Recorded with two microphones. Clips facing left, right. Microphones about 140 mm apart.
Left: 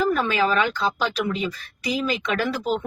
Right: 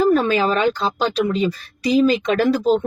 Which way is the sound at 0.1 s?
35° right (ahead or behind).